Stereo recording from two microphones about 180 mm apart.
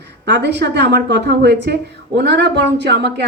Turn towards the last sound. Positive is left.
turn(degrees=-65)  # may be behind; listen again after turning